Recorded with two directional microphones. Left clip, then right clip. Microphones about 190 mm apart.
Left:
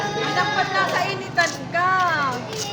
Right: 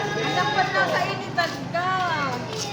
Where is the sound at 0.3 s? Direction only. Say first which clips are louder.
Left 1 dB; 25° left (ahead or behind).